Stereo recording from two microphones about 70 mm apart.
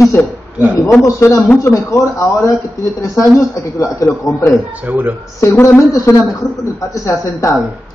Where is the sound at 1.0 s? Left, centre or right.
Left.